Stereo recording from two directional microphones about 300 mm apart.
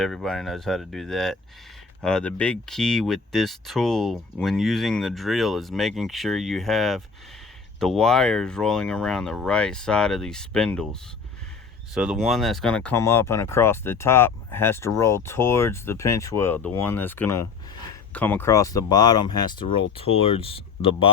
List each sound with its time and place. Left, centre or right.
0.0 s speech: centre
11.9 s speech: centre